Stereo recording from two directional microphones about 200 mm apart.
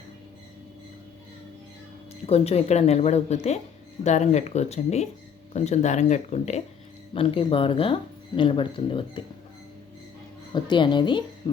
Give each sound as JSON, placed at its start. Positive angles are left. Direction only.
{"t": 2.2, "sound": "speech", "side_deg": 30}
{"t": 10.5, "sound": "speech", "side_deg": 25}